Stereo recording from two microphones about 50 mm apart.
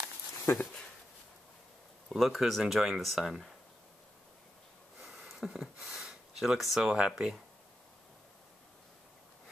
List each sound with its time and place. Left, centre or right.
0.5 s speech: left
2.0 s speech: centre
5.0 s a sound: centre
6.8 s speech: centre